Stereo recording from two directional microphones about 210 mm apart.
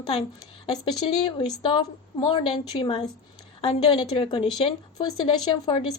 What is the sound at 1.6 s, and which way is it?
A woman's voice, 25° left (ahead or behind).